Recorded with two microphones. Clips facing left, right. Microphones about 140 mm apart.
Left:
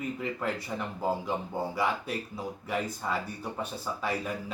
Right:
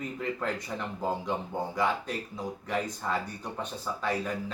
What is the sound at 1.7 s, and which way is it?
Speech, 10° left (ahead or behind).